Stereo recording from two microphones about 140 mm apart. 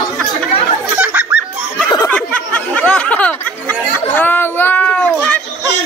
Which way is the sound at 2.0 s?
10° left (ahead or behind).